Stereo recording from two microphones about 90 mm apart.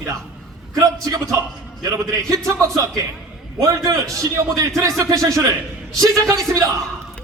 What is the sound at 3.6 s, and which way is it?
A man's voice, 40° right (ahead or behind).